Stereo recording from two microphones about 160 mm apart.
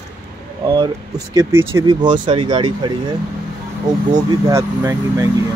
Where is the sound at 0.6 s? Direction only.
30° right (ahead or behind).